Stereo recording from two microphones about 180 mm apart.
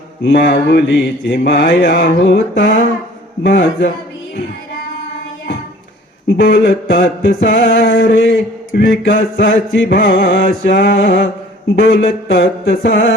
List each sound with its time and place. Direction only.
0.2 s mantra: 60° left (ahead or behind)
6.2 s mantra: 55° left (ahead or behind); by 7.4 s 75° left (ahead or behind)
7.4 s mantra: 60° left (ahead or behind)
8.8 s mantra: 55° left (ahead or behind)